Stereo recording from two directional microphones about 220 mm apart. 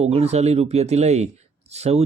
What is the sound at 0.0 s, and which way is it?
Speech, 30° right (ahead or behind).